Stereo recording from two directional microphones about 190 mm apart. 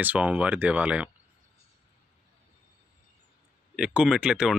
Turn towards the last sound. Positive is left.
turn(degrees=-5)  # may be behind; listen again after turning